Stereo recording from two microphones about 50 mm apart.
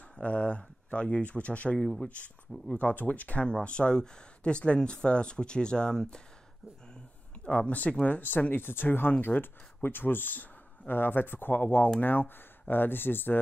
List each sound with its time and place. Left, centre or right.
0.1 s speech: left
1.8 s speech: centre
2.0 s speech: left
7.4 s speech: left